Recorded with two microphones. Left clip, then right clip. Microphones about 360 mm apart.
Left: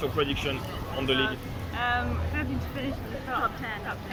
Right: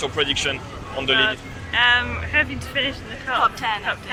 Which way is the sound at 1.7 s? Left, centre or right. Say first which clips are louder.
Right 11 dB; right.